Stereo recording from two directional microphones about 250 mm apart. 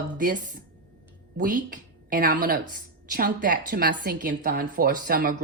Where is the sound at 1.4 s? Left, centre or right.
Right.